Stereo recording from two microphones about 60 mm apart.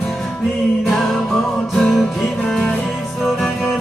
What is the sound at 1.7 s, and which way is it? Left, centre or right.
Music, centre.